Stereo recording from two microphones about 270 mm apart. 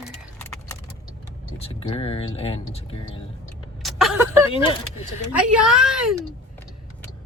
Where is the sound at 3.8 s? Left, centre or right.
Centre.